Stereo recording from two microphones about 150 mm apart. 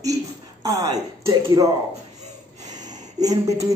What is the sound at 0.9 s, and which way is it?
Speech, 25° right (ahead or behind).